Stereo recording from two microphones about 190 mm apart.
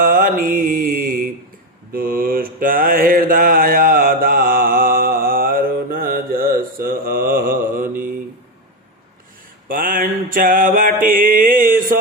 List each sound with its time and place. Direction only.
0.0 s mantra: 45° right (ahead or behind)
9.6 s mantra: 45° right (ahead or behind)
11.0 s a sound: 50° right (ahead or behind)